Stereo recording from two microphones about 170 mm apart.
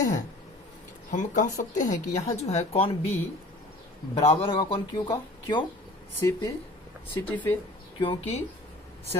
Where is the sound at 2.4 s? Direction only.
40° left (ahead or behind).